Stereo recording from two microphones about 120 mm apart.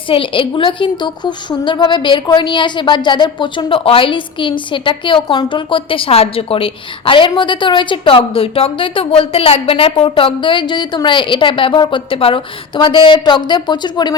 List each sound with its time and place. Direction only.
0.1 s a woman's voice: 45° left (ahead or behind)